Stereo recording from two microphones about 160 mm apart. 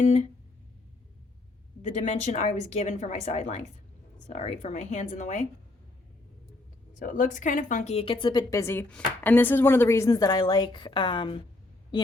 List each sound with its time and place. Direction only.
0.0 s a woman's voice: 45° left (ahead or behind)
2.0 s a woman's voice: 45° left (ahead or behind)
7.0 s speech: 55° left (ahead or behind); by 11.4 s 30° left (ahead or behind)